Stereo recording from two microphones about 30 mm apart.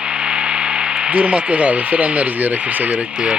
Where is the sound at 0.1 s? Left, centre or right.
Right.